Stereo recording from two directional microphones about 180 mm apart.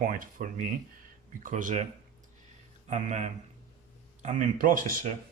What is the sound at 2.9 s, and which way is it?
Speech, 45° right (ahead or behind).